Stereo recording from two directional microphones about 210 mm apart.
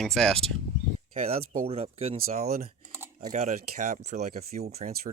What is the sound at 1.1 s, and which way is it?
Speech, 30° right (ahead or behind).